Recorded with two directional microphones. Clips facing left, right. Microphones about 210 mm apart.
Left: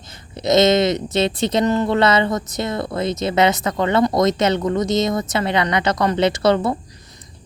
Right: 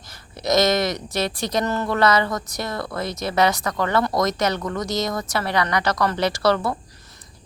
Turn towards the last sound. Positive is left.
turn(degrees=20)  # may be behind; listen again after turning